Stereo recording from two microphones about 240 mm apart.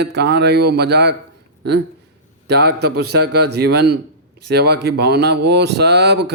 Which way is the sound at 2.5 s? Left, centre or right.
Right.